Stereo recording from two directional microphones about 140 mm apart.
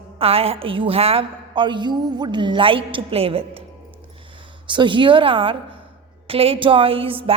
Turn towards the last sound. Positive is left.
turn(degrees=-40)  # may be behind; listen again after turning